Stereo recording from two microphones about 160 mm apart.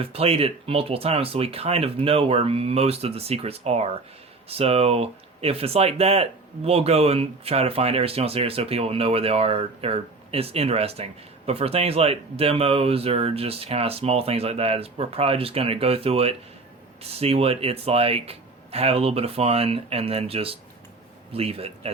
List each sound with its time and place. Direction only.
0.0 s speech: 35° right (ahead or behind)